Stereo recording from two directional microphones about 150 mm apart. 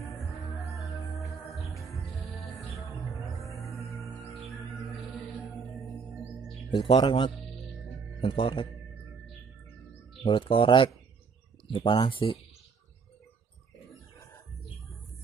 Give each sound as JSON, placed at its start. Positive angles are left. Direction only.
{"t": 1.7, "sound": "music", "side_deg": 0}
{"t": 5.6, "sound": "music", "side_deg": 0}
{"t": 6.7, "sound": "speech", "side_deg": 35}
{"t": 10.2, "sound": "speech", "side_deg": 35}